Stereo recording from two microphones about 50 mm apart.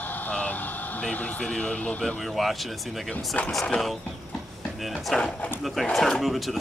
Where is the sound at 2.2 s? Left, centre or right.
Centre.